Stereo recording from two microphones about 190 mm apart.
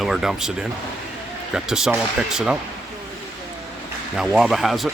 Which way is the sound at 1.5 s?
5° right (ahead or behind).